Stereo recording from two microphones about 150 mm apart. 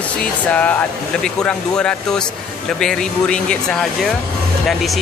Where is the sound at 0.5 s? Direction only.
10° left (ahead or behind).